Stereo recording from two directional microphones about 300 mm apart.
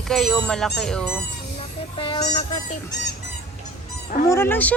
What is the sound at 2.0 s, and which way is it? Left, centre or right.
Honk, centre.